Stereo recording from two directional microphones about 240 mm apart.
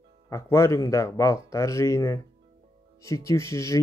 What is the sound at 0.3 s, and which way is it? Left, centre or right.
Speech, centre.